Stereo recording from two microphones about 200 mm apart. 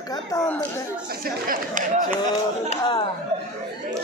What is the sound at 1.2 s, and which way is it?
Speech, 45° right (ahead or behind).